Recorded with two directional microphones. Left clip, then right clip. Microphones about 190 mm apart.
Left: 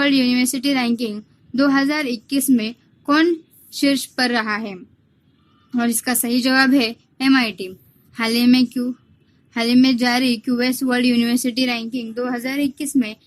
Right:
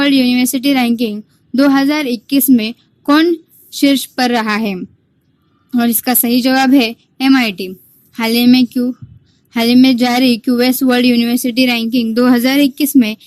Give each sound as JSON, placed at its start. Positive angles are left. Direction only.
{"t": 0.0, "sound": "a woman's voice", "side_deg": -20}